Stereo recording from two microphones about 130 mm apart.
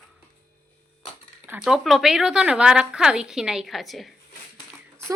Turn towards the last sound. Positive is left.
turn(degrees=0)  # may be behind; listen again after turning